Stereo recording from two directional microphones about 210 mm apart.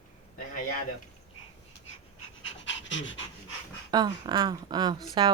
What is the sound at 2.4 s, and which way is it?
Pant, 60° left (ahead or behind).